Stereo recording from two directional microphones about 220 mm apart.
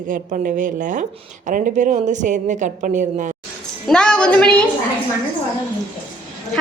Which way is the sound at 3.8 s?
5° left (ahead or behind).